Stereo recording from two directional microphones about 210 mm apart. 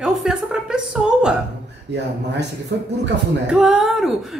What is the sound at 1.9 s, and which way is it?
Speech, 55° right (ahead or behind).